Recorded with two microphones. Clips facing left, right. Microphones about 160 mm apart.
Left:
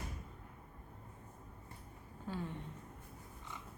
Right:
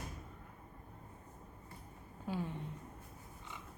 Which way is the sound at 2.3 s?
10° right (ahead or behind).